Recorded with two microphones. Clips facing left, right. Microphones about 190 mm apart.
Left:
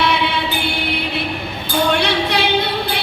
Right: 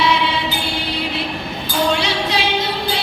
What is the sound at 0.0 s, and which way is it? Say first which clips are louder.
Music: even; 60° left (ahead or behind).